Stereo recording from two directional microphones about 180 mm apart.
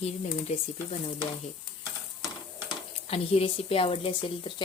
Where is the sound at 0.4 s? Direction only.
40° left (ahead or behind).